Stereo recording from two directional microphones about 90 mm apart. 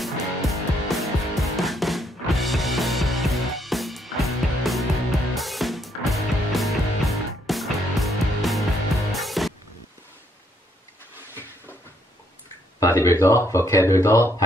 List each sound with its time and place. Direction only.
0.0 s music: centre (ahead or behind)
12.8 s speech: 35° left (ahead or behind)